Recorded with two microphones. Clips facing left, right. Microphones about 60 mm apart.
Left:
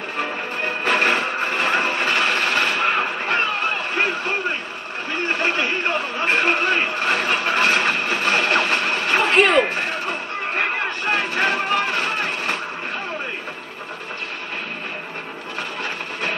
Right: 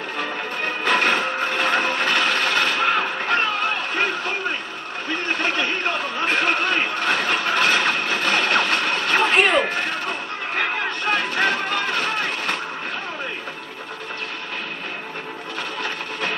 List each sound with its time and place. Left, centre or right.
0.8 s printer: left
5.4 s vehicle: left
9.3 s vehicle: centre
10.6 s a sound: left
11.3 s music: left